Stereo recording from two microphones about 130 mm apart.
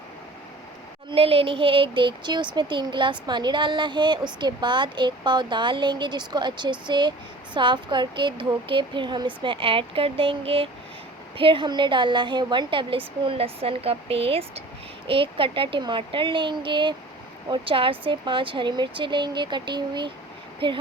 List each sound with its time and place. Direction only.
1.1 s a woman's voice: 45° right (ahead or behind)